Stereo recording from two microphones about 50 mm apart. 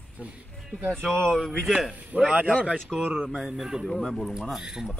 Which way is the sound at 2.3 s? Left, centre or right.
Right.